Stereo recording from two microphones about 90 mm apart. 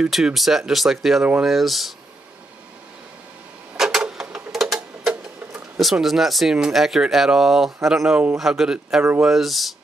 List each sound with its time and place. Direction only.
0.0 s speech: 5° right (ahead or behind)
3.7 s a sound: 5° right (ahead or behind)
5.8 s speech: centre (ahead or behind)